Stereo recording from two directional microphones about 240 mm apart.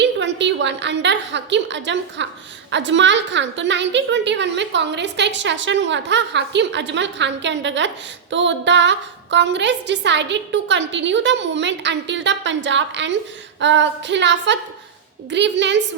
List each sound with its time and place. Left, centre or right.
0.0 s a woman's voice: right